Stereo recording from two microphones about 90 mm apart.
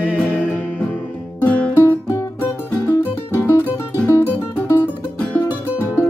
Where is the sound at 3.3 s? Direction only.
30° left (ahead or behind).